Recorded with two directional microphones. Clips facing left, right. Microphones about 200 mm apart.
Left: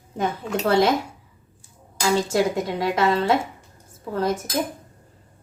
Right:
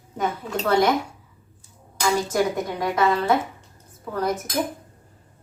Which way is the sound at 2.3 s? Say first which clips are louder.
Left 1 dB; 25° left (ahead or behind).